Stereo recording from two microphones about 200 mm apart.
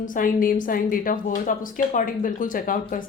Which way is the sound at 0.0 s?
40° left (ahead or behind).